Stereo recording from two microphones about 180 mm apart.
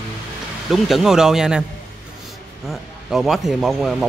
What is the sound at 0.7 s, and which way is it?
Speech, centre (ahead or behind).